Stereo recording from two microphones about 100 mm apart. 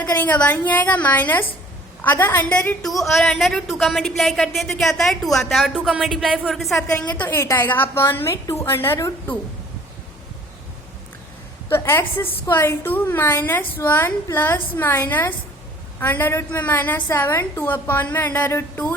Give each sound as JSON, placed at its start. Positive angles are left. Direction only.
{"t": 0.2, "sound": "a woman's voice", "side_deg": 15}
{"t": 2.8, "sound": "a woman's voice", "side_deg": 0}
{"t": 7.1, "sound": "a woman's voice", "side_deg": 20}
{"t": 11.7, "sound": "a woman's voice", "side_deg": 25}